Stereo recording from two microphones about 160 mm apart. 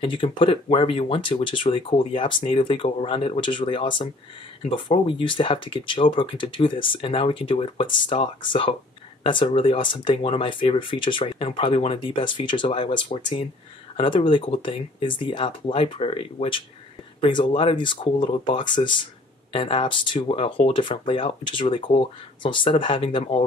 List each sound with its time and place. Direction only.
0.0 s speech: 30° left (ahead or behind)